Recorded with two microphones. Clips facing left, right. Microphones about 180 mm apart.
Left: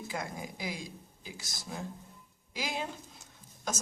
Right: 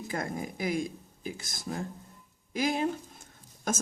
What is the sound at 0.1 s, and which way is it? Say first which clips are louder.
A woman's voice: right 6 dB; 50° right (ahead or behind).